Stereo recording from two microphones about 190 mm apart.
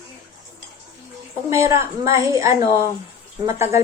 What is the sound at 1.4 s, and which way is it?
Speech, 15° right (ahead or behind).